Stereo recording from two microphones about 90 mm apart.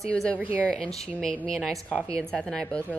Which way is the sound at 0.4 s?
20° right (ahead or behind).